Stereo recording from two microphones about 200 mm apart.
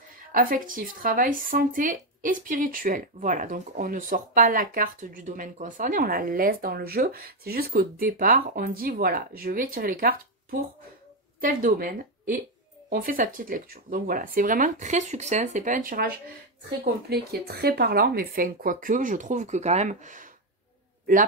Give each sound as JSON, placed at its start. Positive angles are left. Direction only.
{"t": 0.3, "sound": "speech", "side_deg": -45}
{"t": 11.4, "sound": "speech", "side_deg": -45}